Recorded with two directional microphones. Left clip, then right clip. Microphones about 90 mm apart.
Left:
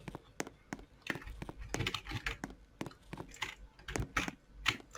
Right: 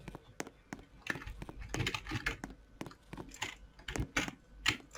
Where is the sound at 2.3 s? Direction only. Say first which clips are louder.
Even; centre (ahead or behind).